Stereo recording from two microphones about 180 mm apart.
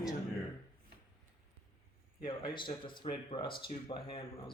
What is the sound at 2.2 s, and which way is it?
Speech, 25° left (ahead or behind).